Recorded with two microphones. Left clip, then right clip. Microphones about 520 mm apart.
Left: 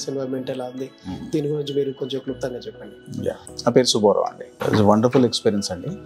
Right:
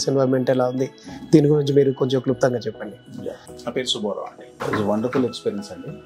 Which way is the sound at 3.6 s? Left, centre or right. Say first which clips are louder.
Left 7 dB; left.